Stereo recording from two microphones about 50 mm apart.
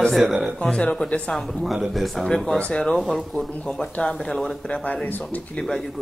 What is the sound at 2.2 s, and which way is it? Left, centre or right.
Speech, centre.